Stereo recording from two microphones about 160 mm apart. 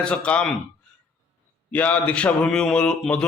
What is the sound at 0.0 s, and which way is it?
Speech, 5° left (ahead or behind).